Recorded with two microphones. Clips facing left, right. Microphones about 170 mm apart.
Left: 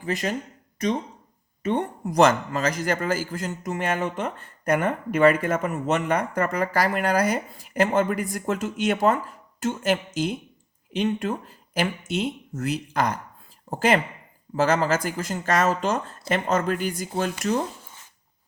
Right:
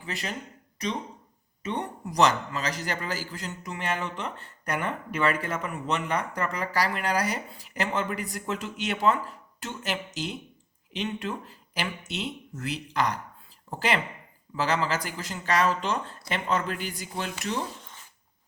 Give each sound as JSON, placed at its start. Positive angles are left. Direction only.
{"t": 0.0, "sound": "a man's voice", "side_deg": 45}
{"t": 1.6, "sound": "a man's voice", "side_deg": 50}